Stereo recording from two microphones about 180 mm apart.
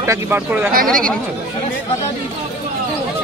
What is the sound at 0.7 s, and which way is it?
Speech, 50° right (ahead or behind).